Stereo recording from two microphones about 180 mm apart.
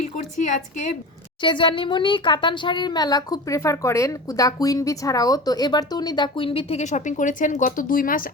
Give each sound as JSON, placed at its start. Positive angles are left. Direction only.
{"t": 0.0, "sound": "a woman's voice", "side_deg": 45}
{"t": 1.4, "sound": "speech", "side_deg": 25}